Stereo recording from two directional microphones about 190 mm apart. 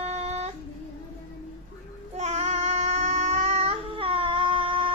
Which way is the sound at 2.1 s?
35° right (ahead or behind).